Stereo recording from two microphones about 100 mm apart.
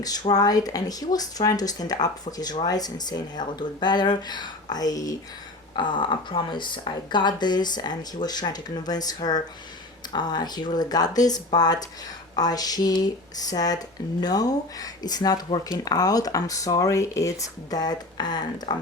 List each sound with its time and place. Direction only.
0.0 s speech: 40° left (ahead or behind)
5.7 s speech: 50° left (ahead or behind)